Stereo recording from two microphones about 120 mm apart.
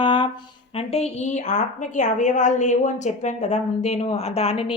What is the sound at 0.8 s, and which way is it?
A woman's voice, 60° left (ahead or behind).